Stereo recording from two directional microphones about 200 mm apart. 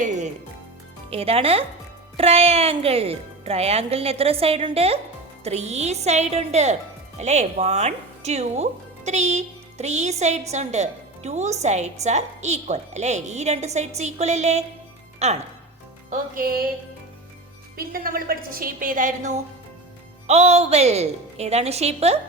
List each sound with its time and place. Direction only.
0.0 s music: 35° right (ahead or behind)
1.1 s a woman's voice: 30° right (ahead or behind); by 16.6 s 50° right (ahead or behind)
17.7 s a woman's voice: 45° right (ahead or behind)